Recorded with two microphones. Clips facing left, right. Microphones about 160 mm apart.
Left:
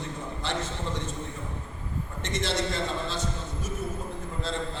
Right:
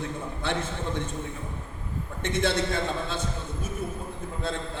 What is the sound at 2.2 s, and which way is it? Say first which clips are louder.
A man's voice: right 4 dB; 55° right (ahead or behind).